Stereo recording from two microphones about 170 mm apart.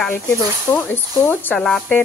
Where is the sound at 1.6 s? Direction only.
Centre (ahead or behind).